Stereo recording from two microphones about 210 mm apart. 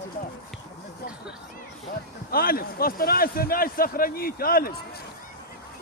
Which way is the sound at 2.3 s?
45° left (ahead or behind).